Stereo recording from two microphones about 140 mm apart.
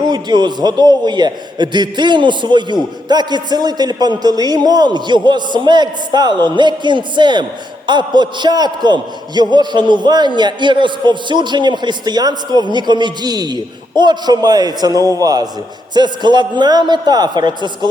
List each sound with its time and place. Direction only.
0.0 s a man's voice: 30° right (ahead or behind)